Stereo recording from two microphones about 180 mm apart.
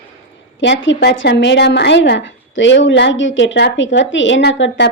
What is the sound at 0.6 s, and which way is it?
Speech, 85° left.